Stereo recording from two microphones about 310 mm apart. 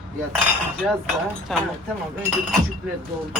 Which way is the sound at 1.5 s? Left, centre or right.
Centre.